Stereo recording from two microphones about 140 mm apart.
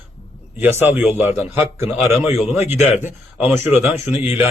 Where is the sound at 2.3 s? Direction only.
Centre (ahead or behind).